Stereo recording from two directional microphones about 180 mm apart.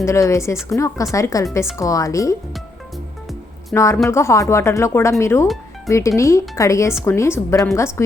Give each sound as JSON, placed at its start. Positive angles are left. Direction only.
{"t": 0.0, "sound": "speech", "side_deg": 15}
{"t": 3.8, "sound": "speech", "side_deg": 15}